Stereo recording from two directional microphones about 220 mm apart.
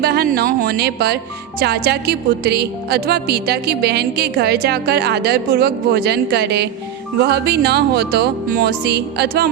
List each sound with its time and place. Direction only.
0.0 s speech: 45° right (ahead or behind)